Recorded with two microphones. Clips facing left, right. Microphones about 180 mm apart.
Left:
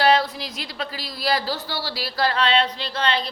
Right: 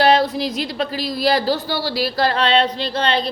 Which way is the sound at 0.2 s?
20° right (ahead or behind).